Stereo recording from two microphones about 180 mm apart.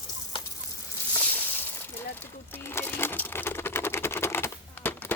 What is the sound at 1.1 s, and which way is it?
Sizzle, 10° left (ahead or behind).